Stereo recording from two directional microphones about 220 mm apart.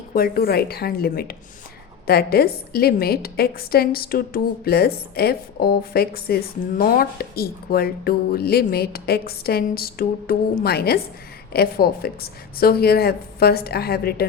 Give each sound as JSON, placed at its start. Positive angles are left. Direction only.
{"t": 0.1, "sound": "a woman's voice", "side_deg": 40}